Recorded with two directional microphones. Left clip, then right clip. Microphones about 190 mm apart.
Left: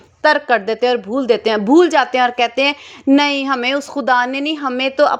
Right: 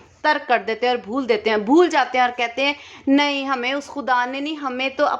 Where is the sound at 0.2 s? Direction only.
25° left (ahead or behind).